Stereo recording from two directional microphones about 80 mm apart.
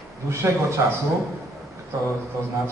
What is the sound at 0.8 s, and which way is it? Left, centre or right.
Speech, right.